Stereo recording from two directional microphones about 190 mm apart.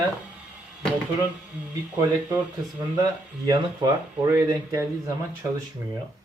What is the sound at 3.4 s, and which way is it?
Speech, 25° right (ahead or behind).